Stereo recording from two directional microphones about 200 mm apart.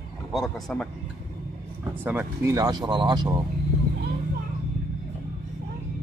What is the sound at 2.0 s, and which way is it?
Speech, 10° right (ahead or behind).